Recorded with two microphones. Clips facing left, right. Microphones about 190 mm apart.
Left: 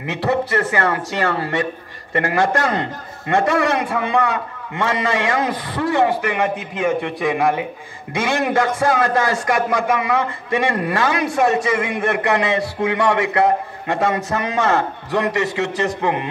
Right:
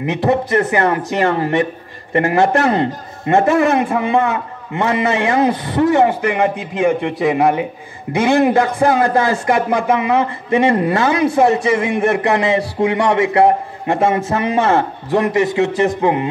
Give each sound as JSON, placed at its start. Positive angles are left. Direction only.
{"t": 0.0, "sound": "a man's voice", "side_deg": -20}